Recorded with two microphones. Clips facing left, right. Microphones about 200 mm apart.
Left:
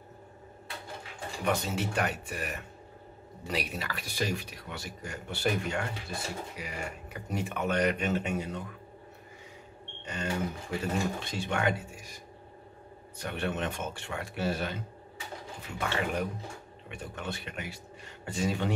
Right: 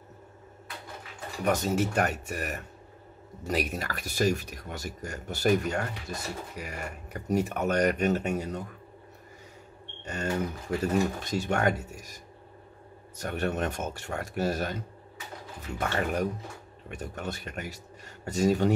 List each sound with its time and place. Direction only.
1.4 s speech: 45° right (ahead or behind)
10.0 s speech: 45° right (ahead or behind)
13.2 s speech: 45° right (ahead or behind)
15.8 s speech: 45° right (ahead or behind)